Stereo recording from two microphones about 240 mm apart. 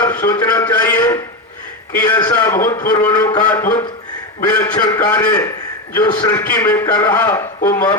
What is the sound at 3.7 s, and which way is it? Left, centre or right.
Speech, centre.